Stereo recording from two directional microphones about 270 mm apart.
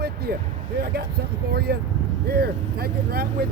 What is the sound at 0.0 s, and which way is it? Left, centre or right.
Vehicle, right.